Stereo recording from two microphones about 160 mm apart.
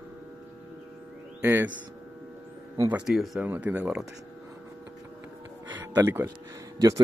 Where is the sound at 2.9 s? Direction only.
Centre (ahead or behind).